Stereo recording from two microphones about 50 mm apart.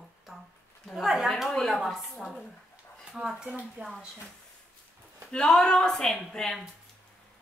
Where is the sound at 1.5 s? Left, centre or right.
Centre.